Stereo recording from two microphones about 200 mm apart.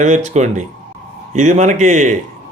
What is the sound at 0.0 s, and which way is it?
A man's voice, 35° right (ahead or behind).